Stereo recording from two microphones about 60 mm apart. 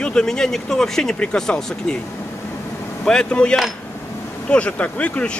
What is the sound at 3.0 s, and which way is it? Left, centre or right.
Speech, centre.